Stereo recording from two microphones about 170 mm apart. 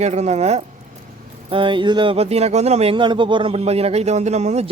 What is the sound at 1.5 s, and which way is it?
A man's voice, 30° right (ahead or behind).